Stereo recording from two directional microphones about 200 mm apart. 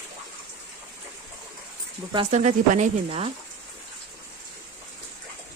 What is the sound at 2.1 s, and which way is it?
Speech, 35° right (ahead or behind).